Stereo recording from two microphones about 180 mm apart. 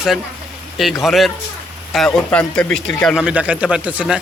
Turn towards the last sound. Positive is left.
turn(degrees=-5)  # may be behind; listen again after turning